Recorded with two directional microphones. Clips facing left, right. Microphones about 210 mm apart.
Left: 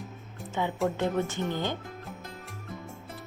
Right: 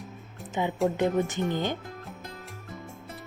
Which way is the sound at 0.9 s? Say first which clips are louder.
Right 3 dB; 15° right (ahead or behind).